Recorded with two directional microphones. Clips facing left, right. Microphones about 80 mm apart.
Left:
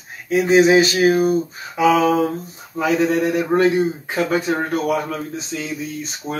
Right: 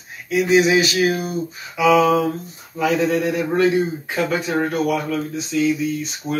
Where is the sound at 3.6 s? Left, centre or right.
Left.